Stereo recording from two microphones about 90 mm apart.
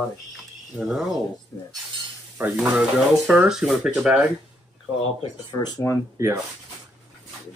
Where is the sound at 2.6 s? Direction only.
10° right (ahead or behind).